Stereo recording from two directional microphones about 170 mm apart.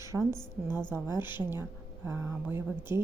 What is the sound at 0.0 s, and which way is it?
A woman's voice, 15° right (ahead or behind).